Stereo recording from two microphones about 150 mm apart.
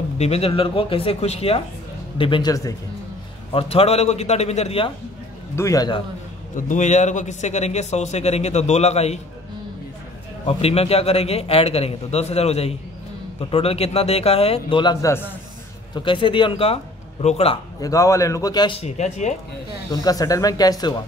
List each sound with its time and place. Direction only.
0.2 s a man's voice: 40° left (ahead or behind)
3.5 s a man's voice: 40° left (ahead or behind)
5.6 s speech: 25° left (ahead or behind)
6.5 s a man's voice: 55° left (ahead or behind)
10.4 s a man's voice: 40° left (ahead or behind); by 15.2 s 20° left (ahead or behind)
15.9 s a man's voice: 35° left (ahead or behind)
17.7 s speech: 20° left (ahead or behind)
18.8 s a man's voice: 50° left (ahead or behind)
19.9 s speech: 25° left (ahead or behind)